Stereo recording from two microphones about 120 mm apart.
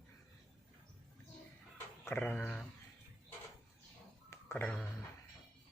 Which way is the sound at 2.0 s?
15° left (ahead or behind).